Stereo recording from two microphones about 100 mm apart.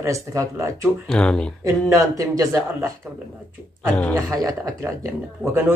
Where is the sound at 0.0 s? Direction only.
30° right (ahead or behind).